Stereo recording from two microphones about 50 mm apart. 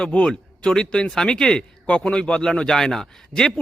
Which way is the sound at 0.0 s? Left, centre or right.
Left.